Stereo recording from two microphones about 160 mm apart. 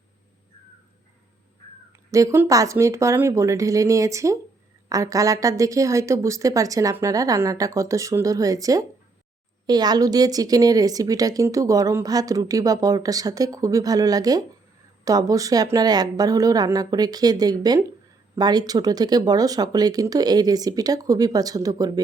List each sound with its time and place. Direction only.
1.9 s speech: 20° right (ahead or behind)